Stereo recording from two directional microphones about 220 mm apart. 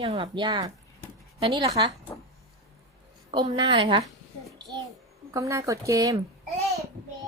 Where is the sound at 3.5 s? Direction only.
20° right (ahead or behind).